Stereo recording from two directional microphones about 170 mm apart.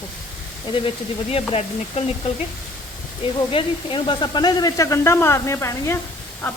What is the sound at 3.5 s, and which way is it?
Speech, 30° left (ahead or behind).